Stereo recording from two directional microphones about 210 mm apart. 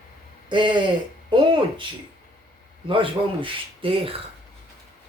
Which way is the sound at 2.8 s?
25° right (ahead or behind).